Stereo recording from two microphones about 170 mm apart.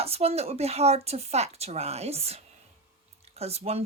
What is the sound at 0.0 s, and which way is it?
Speech, 35° right (ahead or behind).